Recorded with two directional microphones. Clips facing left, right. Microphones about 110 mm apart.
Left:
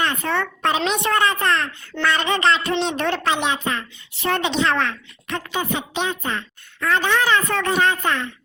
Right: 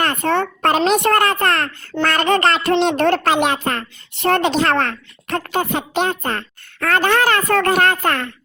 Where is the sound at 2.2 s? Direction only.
40° right (ahead or behind).